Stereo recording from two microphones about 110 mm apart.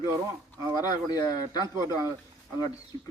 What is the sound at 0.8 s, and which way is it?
Speech, 35° left (ahead or behind).